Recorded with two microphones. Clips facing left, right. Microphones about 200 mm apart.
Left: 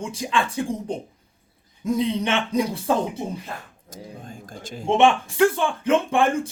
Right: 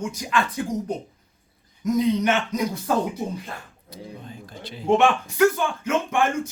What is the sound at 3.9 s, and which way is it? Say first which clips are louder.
Speech: even; 45° left (ahead or behind).